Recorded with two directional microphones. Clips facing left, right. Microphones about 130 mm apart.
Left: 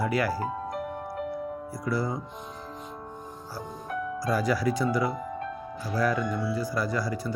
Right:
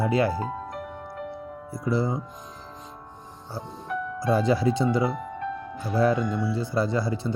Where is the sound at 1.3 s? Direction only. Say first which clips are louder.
Left 3 dB; 25° right (ahead or behind).